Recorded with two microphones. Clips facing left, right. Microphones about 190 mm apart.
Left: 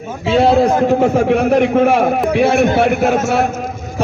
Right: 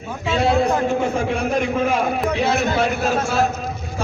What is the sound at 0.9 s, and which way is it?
A man's voice, 65° left (ahead or behind).